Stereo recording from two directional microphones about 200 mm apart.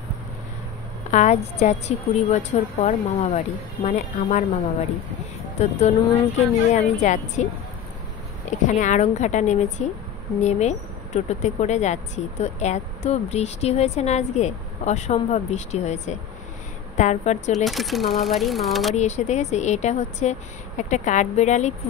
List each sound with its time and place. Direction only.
1.1 s speech: 35° left (ahead or behind)
5.6 s speech: 35° left (ahead or behind)
8.6 s speech: 40° left (ahead or behind)
17.6 s speech: centre (ahead or behind)
18.9 s speech: 35° left (ahead or behind)